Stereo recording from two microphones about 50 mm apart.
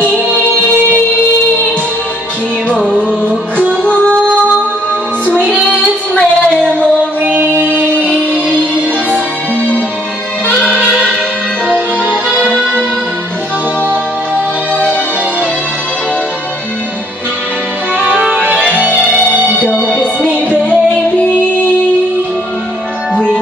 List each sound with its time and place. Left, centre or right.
2.7 s music: centre
3.0 s music: left
5.5 s music: left
7.2 s music: right
10.4 s music: left
12.1 s accordion: centre
12.4 s music: right
18.5 s music: centre
19.8 s music: centre